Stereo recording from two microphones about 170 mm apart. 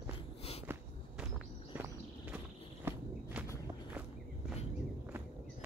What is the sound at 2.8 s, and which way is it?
Walk, 10° right (ahead or behind).